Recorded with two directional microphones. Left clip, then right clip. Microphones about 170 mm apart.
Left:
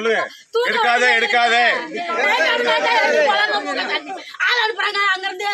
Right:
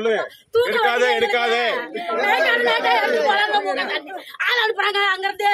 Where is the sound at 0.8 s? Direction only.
90° right.